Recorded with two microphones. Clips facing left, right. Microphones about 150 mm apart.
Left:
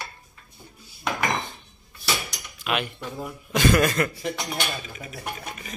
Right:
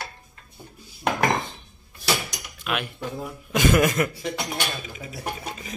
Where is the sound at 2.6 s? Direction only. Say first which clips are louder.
Left 1 dB; centre (ahead or behind).